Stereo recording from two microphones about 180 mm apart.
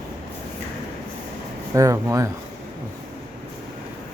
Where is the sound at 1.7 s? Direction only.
20° right (ahead or behind).